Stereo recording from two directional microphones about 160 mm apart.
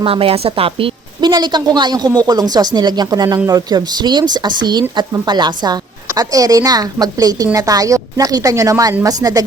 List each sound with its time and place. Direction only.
0.0 s a woman's voice: 35° right (ahead or behind); by 9.4 s 20° right (ahead or behind)